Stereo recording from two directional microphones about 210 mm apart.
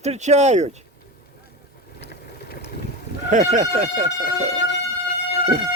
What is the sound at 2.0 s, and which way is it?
Vehicle, 50° left (ahead or behind).